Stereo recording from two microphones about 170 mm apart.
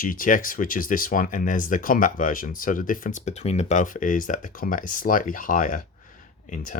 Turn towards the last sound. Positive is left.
turn(degrees=55)  # may be behind; listen again after turning